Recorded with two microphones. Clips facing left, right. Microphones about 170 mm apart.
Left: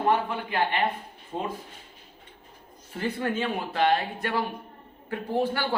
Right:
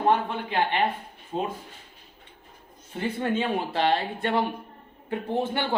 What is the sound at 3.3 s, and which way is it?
A man's voice, 30° right (ahead or behind).